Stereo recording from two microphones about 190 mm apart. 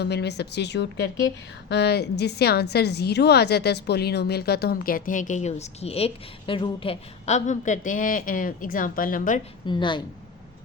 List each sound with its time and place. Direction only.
0.0 s a woman's voice: 60° left (ahead or behind); by 9.4 s 45° left (ahead or behind)
9.6 s speech: 25° left (ahead or behind)